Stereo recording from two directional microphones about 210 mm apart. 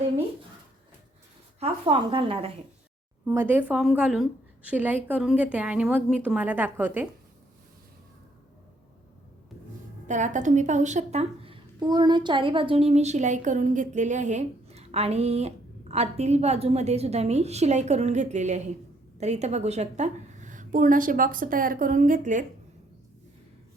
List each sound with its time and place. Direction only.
1.5 s a woman's voice: 25° right (ahead or behind)
3.2 s a woman's voice: 10° right (ahead or behind)
10.1 s a woman's voice: 35° right (ahead or behind)